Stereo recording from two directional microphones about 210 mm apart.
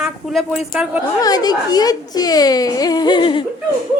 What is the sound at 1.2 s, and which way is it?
Speech, 20° left (ahead or behind).